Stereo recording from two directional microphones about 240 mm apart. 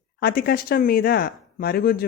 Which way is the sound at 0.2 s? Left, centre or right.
Left.